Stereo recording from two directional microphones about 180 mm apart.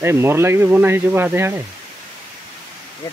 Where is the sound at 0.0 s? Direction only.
15° right (ahead or behind).